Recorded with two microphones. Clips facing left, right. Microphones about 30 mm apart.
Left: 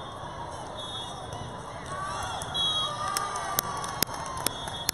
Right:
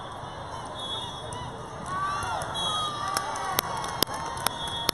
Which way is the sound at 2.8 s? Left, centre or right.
Centre.